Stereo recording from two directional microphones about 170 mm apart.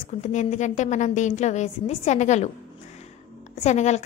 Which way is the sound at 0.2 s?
45° left (ahead or behind).